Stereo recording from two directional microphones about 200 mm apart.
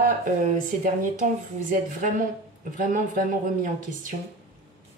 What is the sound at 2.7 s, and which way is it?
A woman's voice, 40° right (ahead or behind).